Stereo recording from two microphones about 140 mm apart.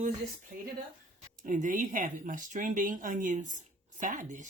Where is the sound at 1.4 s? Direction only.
65° right (ahead or behind).